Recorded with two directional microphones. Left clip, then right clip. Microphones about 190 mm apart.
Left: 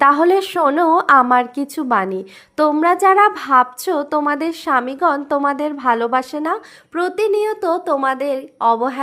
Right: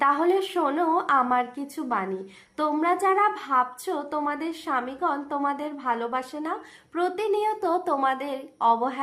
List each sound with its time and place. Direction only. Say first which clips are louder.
0.0 s a woman's voice: left 9 dB; 40° left (ahead or behind)